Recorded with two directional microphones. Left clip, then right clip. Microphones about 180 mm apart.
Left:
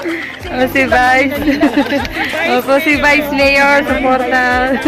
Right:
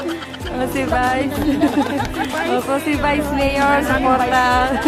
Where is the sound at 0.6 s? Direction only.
10° left (ahead or behind).